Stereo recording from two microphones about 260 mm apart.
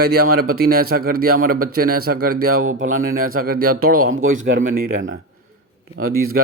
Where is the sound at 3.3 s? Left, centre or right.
Right.